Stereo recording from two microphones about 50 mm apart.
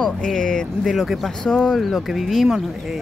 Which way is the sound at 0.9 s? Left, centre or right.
Centre.